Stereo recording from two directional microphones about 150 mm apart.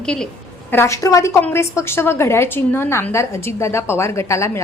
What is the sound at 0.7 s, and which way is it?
A woman's voice, 20° left (ahead or behind).